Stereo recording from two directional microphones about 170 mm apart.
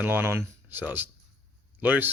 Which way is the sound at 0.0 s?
10° right (ahead or behind).